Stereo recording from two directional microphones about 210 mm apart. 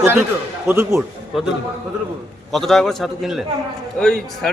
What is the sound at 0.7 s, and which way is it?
Speech, 10° right (ahead or behind).